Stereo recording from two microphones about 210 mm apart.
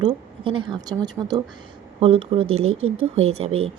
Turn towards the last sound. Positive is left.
turn(degrees=-30)  # may be behind; listen again after turning